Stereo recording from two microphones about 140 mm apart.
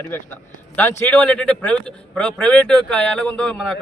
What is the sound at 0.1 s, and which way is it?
A man's voice, 15° left (ahead or behind).